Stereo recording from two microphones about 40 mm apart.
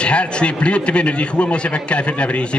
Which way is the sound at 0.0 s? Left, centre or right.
Left.